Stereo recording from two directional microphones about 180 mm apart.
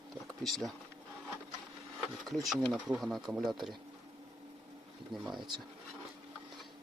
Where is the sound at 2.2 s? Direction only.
Centre (ahead or behind).